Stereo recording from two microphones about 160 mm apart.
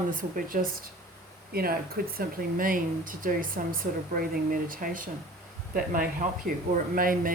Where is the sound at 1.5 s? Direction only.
70° right (ahead or behind).